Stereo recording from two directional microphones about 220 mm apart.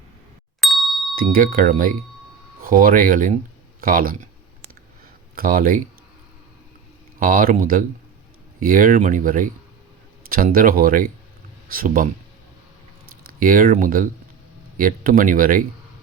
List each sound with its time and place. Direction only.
0.6 s ding: centre (ahead or behind)
1.1 s speech: 40° right (ahead or behind)
5.3 s speech: 40° right (ahead or behind)
7.2 s speech: 40° right (ahead or behind)
13.4 s speech: 40° right (ahead or behind)